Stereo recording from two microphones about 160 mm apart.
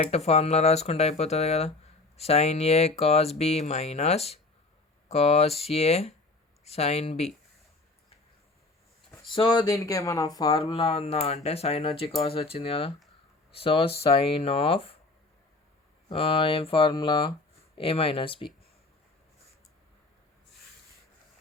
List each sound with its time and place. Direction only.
0.0 s speech: 40° left (ahead or behind)
9.3 s speech: 30° left (ahead or behind)
16.0 s speech: 35° left (ahead or behind)